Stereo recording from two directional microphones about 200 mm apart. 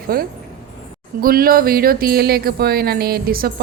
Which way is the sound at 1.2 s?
45° right (ahead or behind).